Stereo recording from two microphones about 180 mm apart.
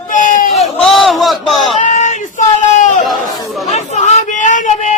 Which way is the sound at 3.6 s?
40° left (ahead or behind).